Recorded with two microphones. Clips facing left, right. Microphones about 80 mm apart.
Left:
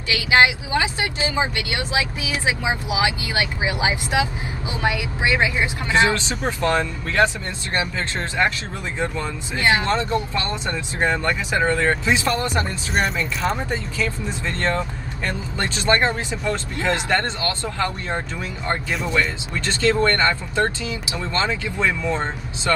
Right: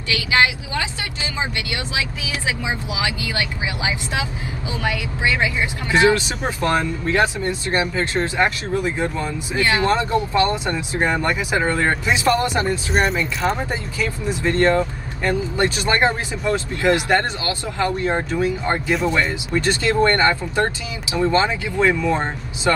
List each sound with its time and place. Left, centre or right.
0.1 s speech: left
6.7 s speech: right
12.5 s speech: centre
14.6 s speech: centre